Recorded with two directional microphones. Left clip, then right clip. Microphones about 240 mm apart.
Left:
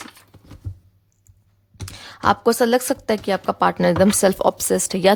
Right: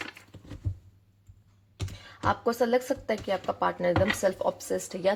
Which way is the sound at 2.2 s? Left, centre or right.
Left.